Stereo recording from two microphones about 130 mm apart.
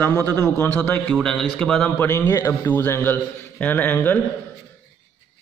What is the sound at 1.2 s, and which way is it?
A man's voice, 5° left (ahead or behind).